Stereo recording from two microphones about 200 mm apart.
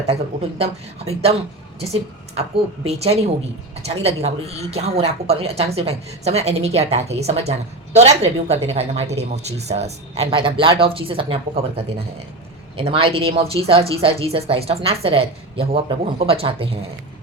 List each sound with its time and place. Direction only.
0.6 s a woman's voice: 30° right (ahead or behind)